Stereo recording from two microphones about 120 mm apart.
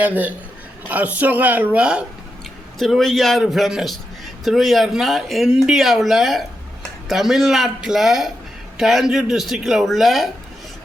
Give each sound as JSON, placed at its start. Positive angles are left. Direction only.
{"t": 0.0, "sound": "a woman's voice", "side_deg": -15}
{"t": 2.7, "sound": "speech", "side_deg": 0}